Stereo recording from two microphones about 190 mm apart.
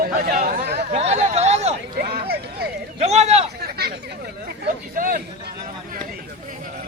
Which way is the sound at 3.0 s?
35° right (ahead or behind).